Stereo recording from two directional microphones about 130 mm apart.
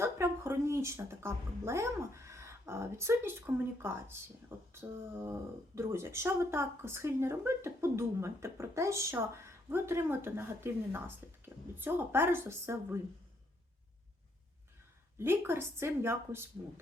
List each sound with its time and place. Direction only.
0.0 s a woman's voice: 20° right (ahead or behind)
15.2 s a woman's voice: 20° right (ahead or behind)